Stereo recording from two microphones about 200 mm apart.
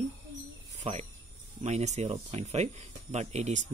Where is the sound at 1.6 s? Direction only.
35° right (ahead or behind).